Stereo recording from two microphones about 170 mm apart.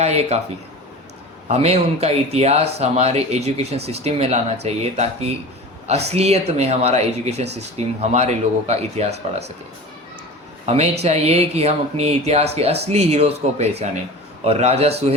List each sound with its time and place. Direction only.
0.0 s speech: 40° right (ahead or behind)
1.5 s speech: 40° right (ahead or behind)
6.1 s speech: 40° right (ahead or behind)
11.0 s speech: 40° right (ahead or behind)